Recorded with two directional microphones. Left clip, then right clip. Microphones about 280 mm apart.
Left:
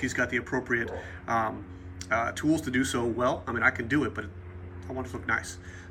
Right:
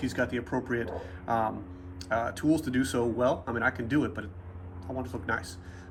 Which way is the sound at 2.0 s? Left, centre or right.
Centre.